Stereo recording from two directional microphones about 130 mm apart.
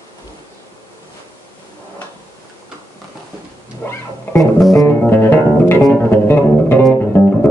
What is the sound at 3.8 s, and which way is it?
Music, 20° left (ahead or behind).